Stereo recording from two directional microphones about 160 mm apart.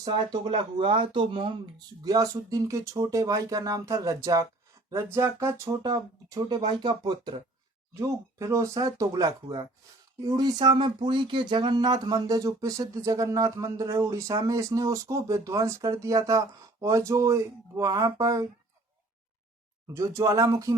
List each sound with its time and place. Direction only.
0.0 s speech: 30° right (ahead or behind)
2.0 s speech: 20° right (ahead or behind)
19.9 s speech: 20° right (ahead or behind)